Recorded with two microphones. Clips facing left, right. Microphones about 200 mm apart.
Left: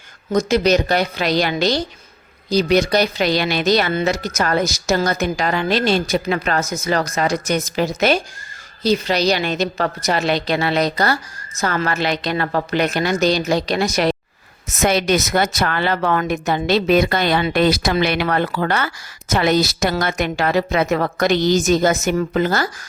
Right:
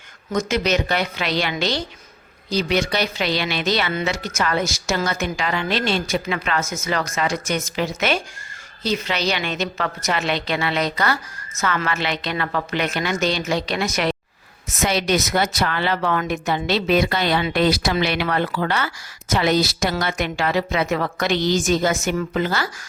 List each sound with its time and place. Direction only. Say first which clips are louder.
0.3 s speech: left 5 dB; 35° left (ahead or behind)
14.8 s speech: left 3 dB; 50° left (ahead or behind)